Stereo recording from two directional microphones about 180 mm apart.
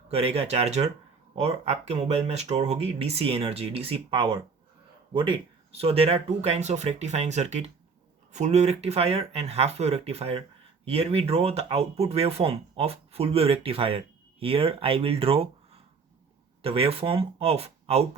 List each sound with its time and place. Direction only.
0.1 s speech: 35° right (ahead or behind)